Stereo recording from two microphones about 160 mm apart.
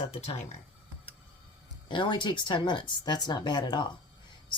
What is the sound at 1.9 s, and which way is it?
Speech, 30° left (ahead or behind).